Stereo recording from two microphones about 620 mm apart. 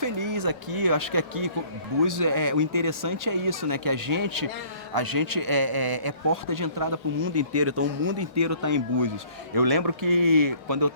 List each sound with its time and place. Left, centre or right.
0.0 s speech: right